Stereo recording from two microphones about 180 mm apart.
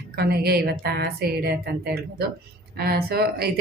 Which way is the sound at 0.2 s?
60° right (ahead or behind).